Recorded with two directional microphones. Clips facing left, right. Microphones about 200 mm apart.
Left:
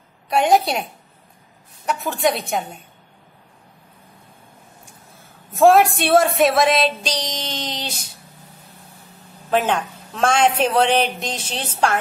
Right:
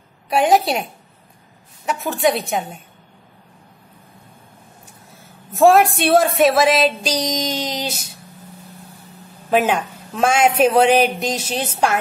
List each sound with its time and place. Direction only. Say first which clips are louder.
0.3 s speech: right 1 dB; centre (ahead or behind)
1.9 s speech: right 2 dB; centre (ahead or behind)
5.5 s speech: right 1 dB; centre (ahead or behind)
9.5 s a woman's voice: right 2 dB; 10° right (ahead or behind)